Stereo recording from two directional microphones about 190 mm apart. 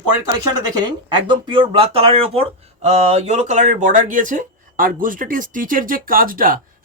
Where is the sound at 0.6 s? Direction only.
20° right (ahead or behind).